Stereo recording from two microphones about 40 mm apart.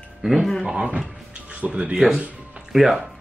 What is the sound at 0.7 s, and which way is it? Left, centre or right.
Speech, right.